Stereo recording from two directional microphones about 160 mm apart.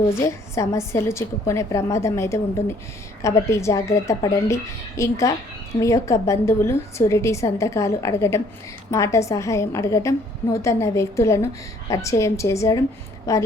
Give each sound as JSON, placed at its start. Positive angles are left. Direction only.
{"t": 0.1, "sound": "a woman's voice", "side_deg": 20}